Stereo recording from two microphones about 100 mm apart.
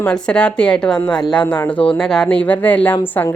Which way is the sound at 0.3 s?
10° left (ahead or behind).